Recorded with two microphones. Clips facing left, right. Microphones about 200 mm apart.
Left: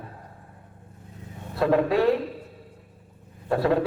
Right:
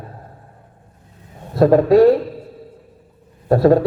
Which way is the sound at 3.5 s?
40° right (ahead or behind).